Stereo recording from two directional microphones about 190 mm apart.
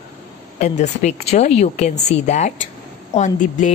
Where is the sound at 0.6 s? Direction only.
35° left (ahead or behind).